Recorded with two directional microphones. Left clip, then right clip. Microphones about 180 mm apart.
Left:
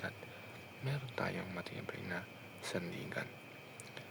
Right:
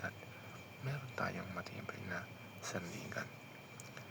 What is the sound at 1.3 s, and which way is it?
Speech, 50° left (ahead or behind).